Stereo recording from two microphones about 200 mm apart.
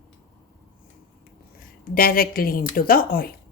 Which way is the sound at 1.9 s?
45° left (ahead or behind).